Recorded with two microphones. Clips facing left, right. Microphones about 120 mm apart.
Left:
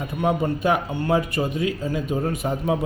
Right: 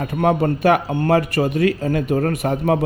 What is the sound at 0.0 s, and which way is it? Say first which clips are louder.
A man's voice: right 5 dB; 65° right (ahead or behind).